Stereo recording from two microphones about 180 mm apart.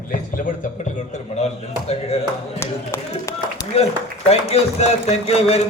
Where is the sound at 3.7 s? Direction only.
35° left (ahead or behind).